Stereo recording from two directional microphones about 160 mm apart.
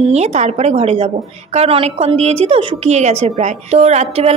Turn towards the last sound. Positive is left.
turn(degrees=-45)  # may be behind; listen again after turning